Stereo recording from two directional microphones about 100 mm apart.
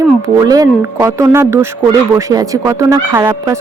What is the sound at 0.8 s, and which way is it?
A woman's voice, 25° right (ahead or behind).